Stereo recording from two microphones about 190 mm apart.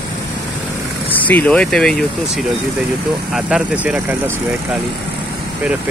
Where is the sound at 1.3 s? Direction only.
5° left (ahead or behind).